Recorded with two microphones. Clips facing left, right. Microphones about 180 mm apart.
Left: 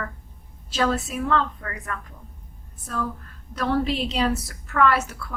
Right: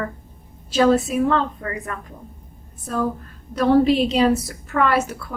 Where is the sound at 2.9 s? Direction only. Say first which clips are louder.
Right 6 dB; 25° right (ahead or behind).